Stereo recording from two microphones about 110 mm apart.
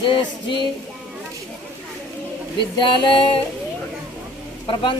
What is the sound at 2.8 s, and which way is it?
Speech, 50° left (ahead or behind).